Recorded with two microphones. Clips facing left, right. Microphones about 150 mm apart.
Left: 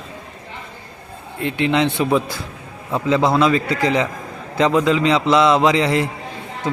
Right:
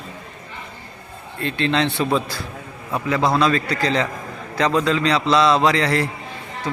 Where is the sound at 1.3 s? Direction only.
15° left (ahead or behind).